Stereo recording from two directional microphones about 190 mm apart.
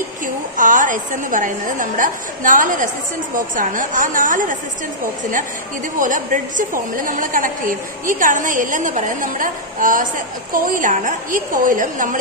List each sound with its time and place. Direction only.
0.6 s a woman's voice: 45° right (ahead or behind)
5.9 s a woman's voice: 45° right (ahead or behind)